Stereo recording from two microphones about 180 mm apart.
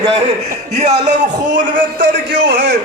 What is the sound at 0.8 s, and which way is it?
Speech, 40° right (ahead or behind).